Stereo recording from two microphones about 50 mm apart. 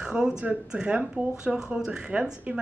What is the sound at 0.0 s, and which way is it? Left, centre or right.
A woman's voice, centre.